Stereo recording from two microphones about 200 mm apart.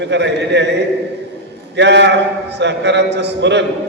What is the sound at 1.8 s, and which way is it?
A man's voice, 60° right (ahead or behind).